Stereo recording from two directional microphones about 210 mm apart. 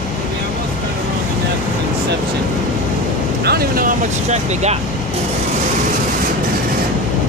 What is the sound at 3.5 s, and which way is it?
Vehicle, 45° right (ahead or behind).